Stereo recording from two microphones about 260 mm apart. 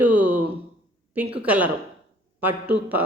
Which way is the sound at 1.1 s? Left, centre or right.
Centre.